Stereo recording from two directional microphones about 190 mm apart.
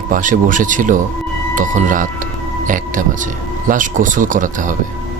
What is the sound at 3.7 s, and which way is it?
Speech, 45° right (ahead or behind).